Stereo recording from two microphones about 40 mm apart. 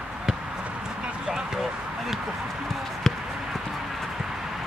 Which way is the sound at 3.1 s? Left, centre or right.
Centre.